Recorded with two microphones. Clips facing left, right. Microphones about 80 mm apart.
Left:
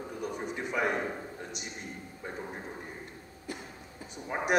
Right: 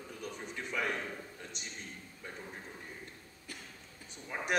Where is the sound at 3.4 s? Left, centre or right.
Left.